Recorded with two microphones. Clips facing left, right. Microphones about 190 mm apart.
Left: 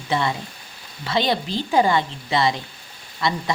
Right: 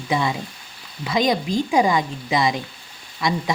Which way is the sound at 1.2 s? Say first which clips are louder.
Right 2 dB; 30° left (ahead or behind).